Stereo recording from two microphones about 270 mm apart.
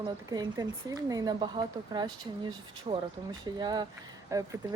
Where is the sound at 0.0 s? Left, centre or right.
Centre.